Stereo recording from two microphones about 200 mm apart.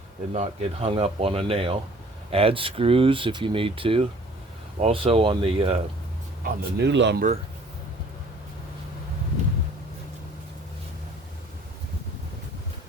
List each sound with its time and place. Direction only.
0.3 s speech: 30° right (ahead or behind)
6.4 s speech: 55° right (ahead or behind)